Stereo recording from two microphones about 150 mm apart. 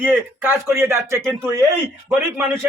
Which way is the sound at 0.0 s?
15° right (ahead or behind).